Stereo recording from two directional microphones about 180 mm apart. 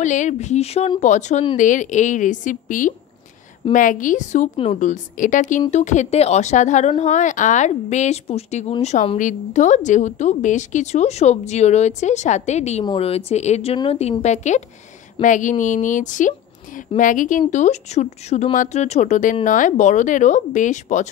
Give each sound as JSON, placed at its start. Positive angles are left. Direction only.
{"t": 0.0, "sound": "a woman's voice", "side_deg": 40}